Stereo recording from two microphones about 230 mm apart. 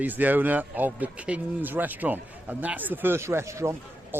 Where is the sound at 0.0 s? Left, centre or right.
Centre.